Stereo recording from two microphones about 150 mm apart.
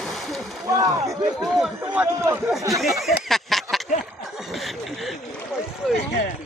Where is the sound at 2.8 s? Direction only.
Centre (ahead or behind).